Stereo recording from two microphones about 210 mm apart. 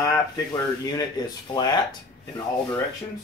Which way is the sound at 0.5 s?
20° left (ahead or behind).